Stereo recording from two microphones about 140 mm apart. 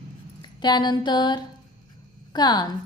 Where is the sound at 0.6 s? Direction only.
30° left (ahead or behind).